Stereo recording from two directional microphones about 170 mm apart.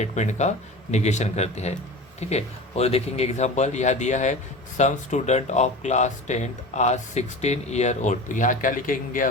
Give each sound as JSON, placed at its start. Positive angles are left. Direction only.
{"t": 0.0, "sound": "speech", "side_deg": 45}